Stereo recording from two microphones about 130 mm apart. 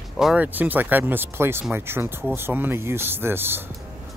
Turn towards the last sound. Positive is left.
turn(degrees=-15)  # may be behind; listen again after turning